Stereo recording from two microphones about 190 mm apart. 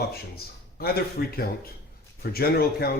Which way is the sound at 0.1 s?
55° left (ahead or behind).